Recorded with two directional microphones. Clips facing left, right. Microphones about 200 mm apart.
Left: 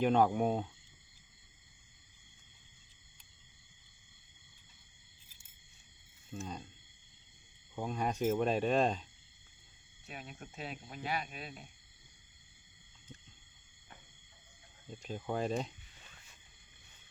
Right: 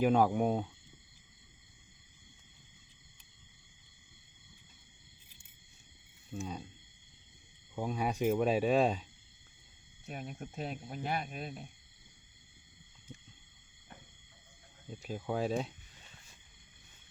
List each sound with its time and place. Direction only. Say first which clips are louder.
0.0 s speech: right 1 dB; 5° right (ahead or behind)
6.3 s speech: right 2 dB; 10° right (ahead or behind)
7.8 s speech: right 1 dB; 10° right (ahead or behind)
10.1 s speech: right 5 dB; 45° right (ahead or behind)
14.8 s speech: right 2 dB; 5° right (ahead or behind)